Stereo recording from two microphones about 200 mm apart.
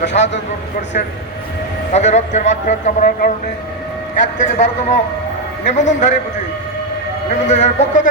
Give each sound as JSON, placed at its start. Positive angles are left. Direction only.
{"t": 0.0, "sound": "speech", "side_deg": 60}
{"t": 1.9, "sound": "a man's voice", "side_deg": 35}
{"t": 7.4, "sound": "a man's voice", "side_deg": 35}